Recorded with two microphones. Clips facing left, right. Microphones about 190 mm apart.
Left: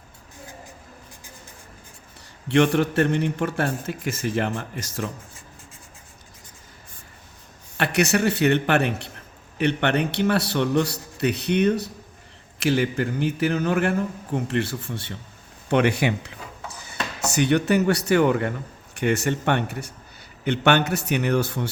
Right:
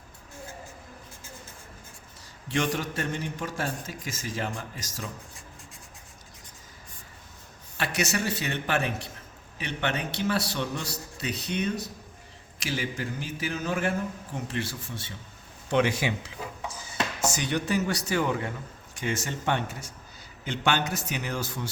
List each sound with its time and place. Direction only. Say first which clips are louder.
2.5 s a man's voice: left 9 dB; 65° left (ahead or behind)
7.8 s a man's voice: left 8 dB; 60° left (ahead or behind)